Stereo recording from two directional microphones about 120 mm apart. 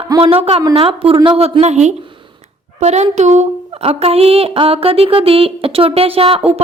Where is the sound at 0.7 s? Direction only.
55° right (ahead or behind).